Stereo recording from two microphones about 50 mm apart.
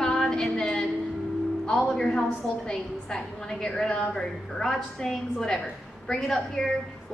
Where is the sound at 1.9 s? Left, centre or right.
Centre.